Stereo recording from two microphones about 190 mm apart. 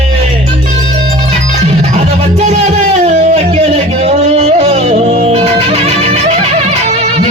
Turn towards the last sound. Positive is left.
turn(degrees=-35)  # may be behind; listen again after turning